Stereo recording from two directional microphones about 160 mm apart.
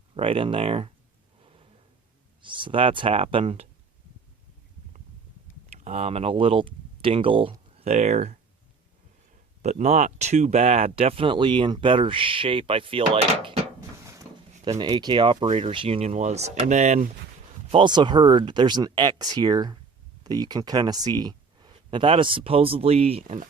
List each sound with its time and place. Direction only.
0.1 s speech: 35° right (ahead or behind)
2.4 s speech: 30° right (ahead or behind)
5.7 s speech: 40° right (ahead or behind)
9.6 s speech: 45° right (ahead or behind)
14.1 s a sound: 20° right (ahead or behind)
14.8 s speech: 30° right (ahead or behind); by 17.1 s 50° right (ahead or behind)
17.7 s speech: 30° right (ahead or behind)